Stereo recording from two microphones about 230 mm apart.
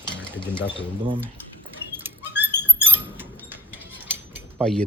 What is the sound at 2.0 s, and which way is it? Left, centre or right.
Rodents, centre.